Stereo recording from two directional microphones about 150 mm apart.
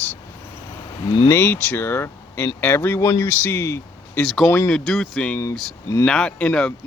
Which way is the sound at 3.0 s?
25° left (ahead or behind).